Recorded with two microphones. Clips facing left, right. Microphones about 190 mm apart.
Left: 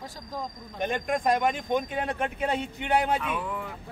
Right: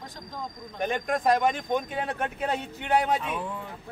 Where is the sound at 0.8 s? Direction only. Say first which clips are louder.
Right 1 dB; centre (ahead or behind).